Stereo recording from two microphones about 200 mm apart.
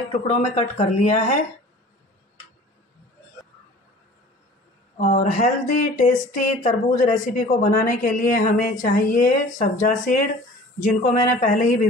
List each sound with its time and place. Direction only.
0.3 s speech: 35° left (ahead or behind)
4.9 s speech: 40° left (ahead or behind)